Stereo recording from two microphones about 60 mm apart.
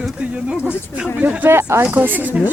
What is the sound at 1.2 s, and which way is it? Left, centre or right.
Speech, right.